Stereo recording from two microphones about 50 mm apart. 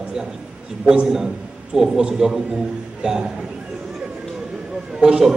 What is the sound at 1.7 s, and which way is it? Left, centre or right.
A man's voice, centre.